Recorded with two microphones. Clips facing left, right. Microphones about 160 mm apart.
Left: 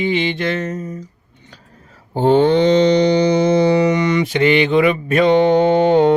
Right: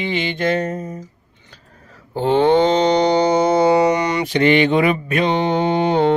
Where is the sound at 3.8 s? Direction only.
40° right (ahead or behind).